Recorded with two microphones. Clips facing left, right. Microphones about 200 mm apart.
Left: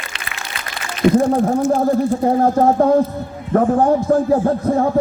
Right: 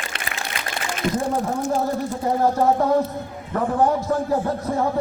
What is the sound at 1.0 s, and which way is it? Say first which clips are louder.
Speech: left 11 dB; 40° left (ahead or behind).